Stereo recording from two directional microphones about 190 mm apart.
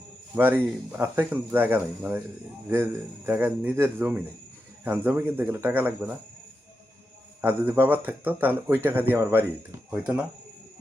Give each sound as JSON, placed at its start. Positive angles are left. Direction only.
{"t": 0.3, "sound": "speech", "side_deg": -10}
{"t": 7.4, "sound": "speech", "side_deg": -10}